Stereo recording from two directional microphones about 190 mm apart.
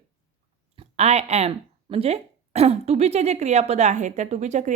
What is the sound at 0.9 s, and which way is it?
A woman's voice, 35° right (ahead or behind).